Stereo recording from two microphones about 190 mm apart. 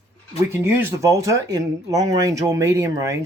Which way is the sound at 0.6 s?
15° right (ahead or behind).